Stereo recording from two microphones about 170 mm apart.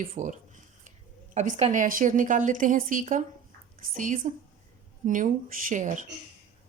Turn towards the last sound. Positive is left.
turn(degrees=-45)  # may be behind; listen again after turning